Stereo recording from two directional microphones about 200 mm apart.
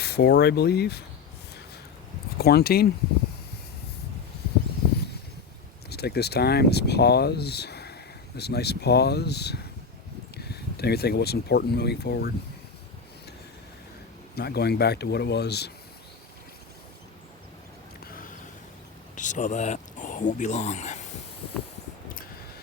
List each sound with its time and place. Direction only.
0.0 s speech: 55° left (ahead or behind)
2.4 s speech: 50° left (ahead or behind)
5.9 s speech: 55° left (ahead or behind)
14.3 s speech: 55° left (ahead or behind)
18.0 s a sound: 45° left (ahead or behind)
19.1 s speech: 40° left (ahead or behind)